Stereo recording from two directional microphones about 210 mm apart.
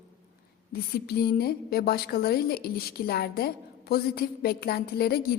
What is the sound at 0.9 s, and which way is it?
A woman's voice, 45° left (ahead or behind).